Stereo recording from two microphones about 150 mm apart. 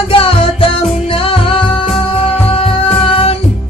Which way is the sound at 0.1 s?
40° left (ahead or behind).